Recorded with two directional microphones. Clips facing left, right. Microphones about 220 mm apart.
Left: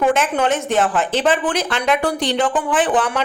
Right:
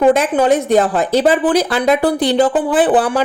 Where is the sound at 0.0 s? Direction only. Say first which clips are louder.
Right 5 dB; 35° right (ahead or behind).